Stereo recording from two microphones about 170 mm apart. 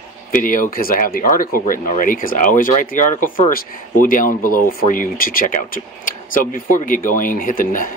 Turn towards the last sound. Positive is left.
turn(degrees=55)  # may be behind; listen again after turning